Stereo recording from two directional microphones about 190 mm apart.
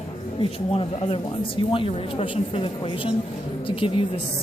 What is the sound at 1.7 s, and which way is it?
Speech, 30° left (ahead or behind).